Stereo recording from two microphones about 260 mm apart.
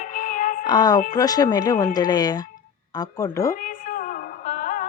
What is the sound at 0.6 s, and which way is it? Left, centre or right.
A woman's voice, centre.